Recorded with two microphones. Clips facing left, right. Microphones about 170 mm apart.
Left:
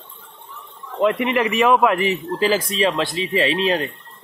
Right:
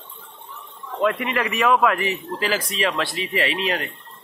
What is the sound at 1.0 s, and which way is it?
A man's voice, 20° left (ahead or behind).